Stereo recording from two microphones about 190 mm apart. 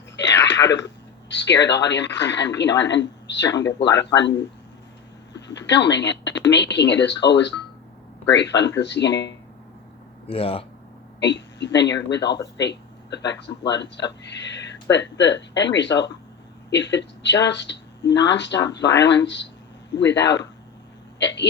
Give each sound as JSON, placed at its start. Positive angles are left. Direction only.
{"t": 0.6, "sound": "speech", "side_deg": 70}
{"t": 3.7, "sound": "speech", "side_deg": 20}
{"t": 5.3, "sound": "speech", "side_deg": 65}
{"t": 10.2, "sound": "speech", "side_deg": 30}
{"t": 11.2, "sound": "speech", "side_deg": 65}